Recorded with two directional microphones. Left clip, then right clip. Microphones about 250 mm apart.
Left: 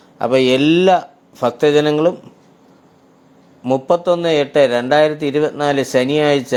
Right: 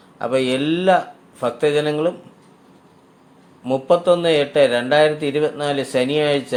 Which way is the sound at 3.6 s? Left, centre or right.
Left.